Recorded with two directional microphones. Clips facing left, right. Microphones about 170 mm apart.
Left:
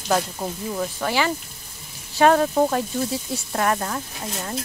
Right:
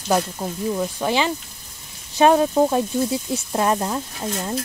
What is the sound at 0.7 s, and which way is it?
Speech, 20° right (ahead or behind).